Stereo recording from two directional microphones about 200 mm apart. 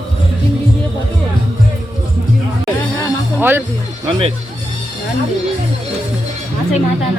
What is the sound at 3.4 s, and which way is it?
Music, 10° right (ahead or behind).